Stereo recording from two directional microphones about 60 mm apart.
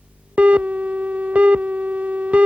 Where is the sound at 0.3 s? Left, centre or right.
Centre.